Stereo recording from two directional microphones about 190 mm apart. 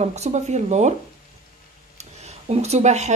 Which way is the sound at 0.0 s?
35° right (ahead or behind).